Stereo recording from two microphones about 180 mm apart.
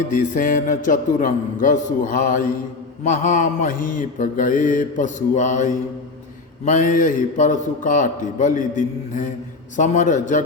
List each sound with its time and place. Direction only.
0.1 s mantra: 50° left (ahead or behind)